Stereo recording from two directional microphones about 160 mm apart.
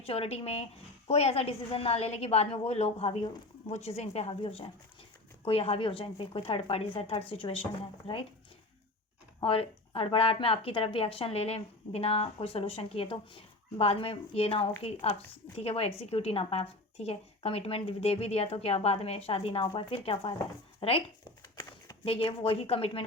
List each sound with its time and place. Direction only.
0.0 s a woman's voice: 35° left (ahead or behind)
9.4 s a woman's voice: 35° left (ahead or behind)